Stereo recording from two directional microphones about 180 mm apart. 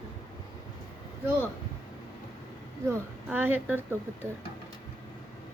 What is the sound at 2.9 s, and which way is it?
A woman's voice, 10° right (ahead or behind).